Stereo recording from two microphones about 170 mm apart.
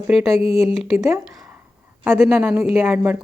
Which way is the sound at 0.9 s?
15° right (ahead or behind).